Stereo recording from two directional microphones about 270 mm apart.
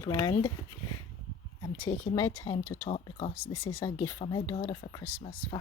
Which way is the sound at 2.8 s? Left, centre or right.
Left.